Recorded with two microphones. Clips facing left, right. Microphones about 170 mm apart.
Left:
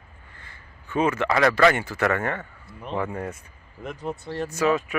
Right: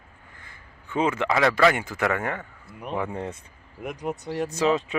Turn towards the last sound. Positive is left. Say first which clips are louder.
# even
turn(degrees=-20)  # may be behind; listen again after turning